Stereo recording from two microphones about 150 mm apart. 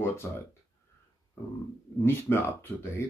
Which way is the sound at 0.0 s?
15° left (ahead or behind).